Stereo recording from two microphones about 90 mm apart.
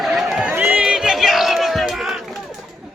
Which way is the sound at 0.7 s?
5° right (ahead or behind).